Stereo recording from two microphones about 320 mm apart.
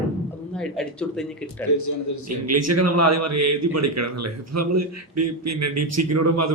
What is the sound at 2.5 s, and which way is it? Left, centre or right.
A man's voice, right.